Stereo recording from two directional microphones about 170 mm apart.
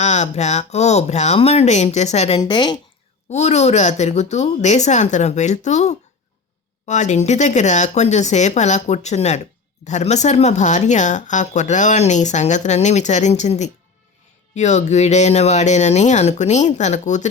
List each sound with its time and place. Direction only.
0.0 s speech: 40° left (ahead or behind)
2.4 s speech: 25° left (ahead or behind)
3.2 s speech: 40° left (ahead or behind)